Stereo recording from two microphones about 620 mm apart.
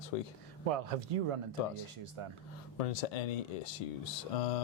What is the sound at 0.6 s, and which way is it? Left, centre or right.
Speech, right.